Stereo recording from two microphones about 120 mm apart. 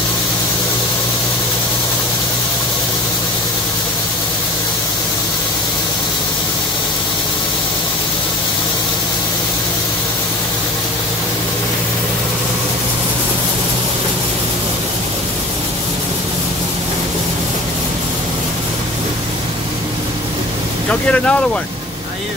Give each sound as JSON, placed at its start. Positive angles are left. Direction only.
{"t": 20.9, "sound": "speech", "side_deg": 10}